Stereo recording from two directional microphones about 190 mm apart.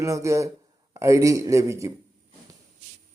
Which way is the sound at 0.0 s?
15° right (ahead or behind).